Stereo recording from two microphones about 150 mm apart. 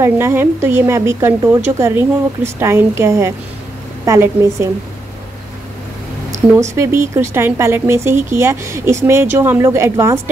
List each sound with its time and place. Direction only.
0.0 s a woman's voice: 15° right (ahead or behind)
6.3 s speech: 20° right (ahead or behind)